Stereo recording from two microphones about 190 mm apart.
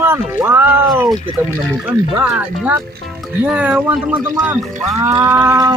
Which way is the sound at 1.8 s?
10° right (ahead or behind).